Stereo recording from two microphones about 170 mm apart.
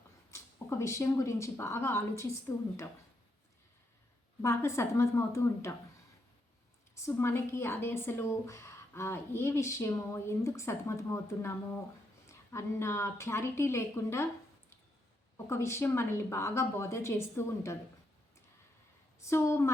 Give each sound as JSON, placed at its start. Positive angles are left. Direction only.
{"t": 0.3, "sound": "speech", "side_deg": 15}
{"t": 4.4, "sound": "a woman's voice", "side_deg": 15}
{"t": 6.9, "sound": "a woman's voice", "side_deg": 15}
{"t": 15.4, "sound": "a woman's voice", "side_deg": 15}
{"t": 19.2, "sound": "a woman's voice", "side_deg": 15}